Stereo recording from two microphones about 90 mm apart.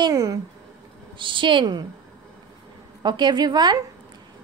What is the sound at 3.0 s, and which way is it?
Speech, 55° right (ahead or behind).